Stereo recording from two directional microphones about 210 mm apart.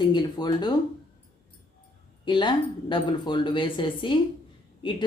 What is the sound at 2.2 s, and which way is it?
Speech, 20° left (ahead or behind).